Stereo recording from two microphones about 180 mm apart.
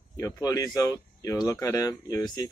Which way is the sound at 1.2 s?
20° left (ahead or behind).